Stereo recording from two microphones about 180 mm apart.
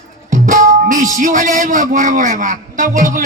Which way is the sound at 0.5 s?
45° right (ahead or behind).